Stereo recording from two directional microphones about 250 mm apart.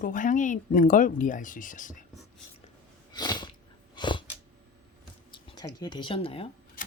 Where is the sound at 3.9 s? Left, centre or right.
Centre.